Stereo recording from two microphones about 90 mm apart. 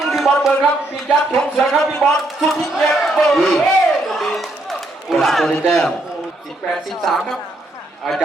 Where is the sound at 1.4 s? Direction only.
5° left (ahead or behind).